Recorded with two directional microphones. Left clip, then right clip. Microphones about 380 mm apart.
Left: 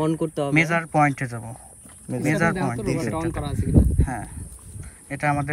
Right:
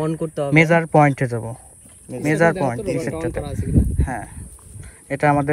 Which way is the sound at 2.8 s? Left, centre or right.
Left.